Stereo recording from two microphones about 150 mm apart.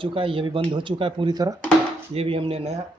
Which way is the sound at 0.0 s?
35° right (ahead or behind).